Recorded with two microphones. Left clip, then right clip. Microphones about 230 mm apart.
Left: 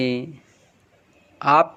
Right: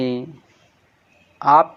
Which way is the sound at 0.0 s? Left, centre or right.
Centre.